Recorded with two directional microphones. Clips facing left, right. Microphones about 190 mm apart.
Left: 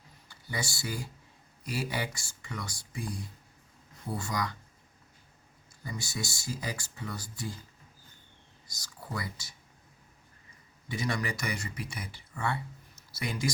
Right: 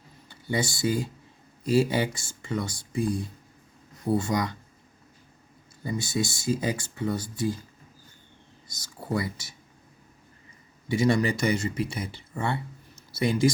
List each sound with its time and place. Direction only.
0.3 s speech: 25° right (ahead or behind)
5.8 s speech: 25° right (ahead or behind)
9.1 s speech: 25° right (ahead or behind)
10.8 s speech: 25° right (ahead or behind)